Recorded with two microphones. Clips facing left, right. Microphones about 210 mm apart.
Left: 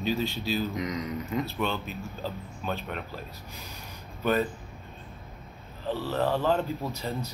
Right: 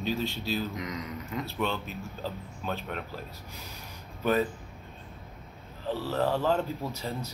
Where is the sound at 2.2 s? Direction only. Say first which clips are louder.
Left 1 dB; centre (ahead or behind).